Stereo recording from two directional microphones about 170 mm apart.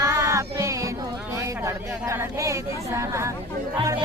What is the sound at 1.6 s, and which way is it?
Speech, 15° right (ahead or behind).